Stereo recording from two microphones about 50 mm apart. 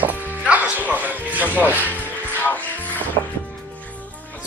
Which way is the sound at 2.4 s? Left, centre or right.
Left.